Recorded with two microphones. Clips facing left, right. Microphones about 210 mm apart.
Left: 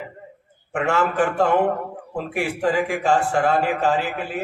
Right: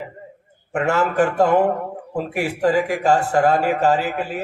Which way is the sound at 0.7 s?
40° right (ahead or behind).